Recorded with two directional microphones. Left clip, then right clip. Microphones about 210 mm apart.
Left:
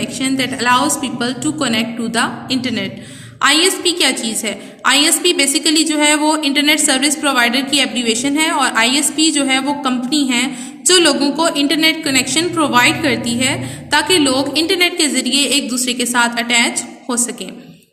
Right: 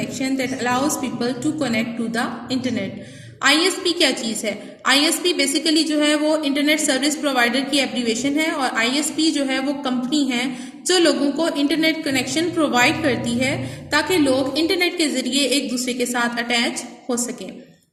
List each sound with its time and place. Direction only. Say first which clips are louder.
0.2 s a woman's voice: left 5 dB; 50° left (ahead or behind)
4.4 s a woman's voice: left 4 dB; 50° left (ahead or behind)